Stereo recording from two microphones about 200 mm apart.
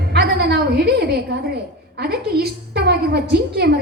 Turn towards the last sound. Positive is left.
turn(degrees=-50)  # may be behind; listen again after turning